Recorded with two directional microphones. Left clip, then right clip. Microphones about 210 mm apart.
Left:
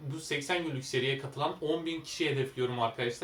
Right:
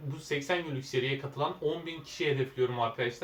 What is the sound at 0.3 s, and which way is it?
Speech, 15° left (ahead or behind).